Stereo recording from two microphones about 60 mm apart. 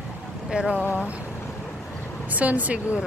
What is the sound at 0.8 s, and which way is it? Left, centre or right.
Speech, left.